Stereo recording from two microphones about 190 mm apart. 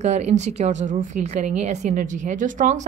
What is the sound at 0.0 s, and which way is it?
A woman's voice, 35° right (ahead or behind).